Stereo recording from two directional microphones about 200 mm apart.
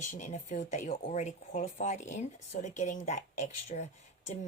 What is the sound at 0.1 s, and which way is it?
Speech, 40° left (ahead or behind).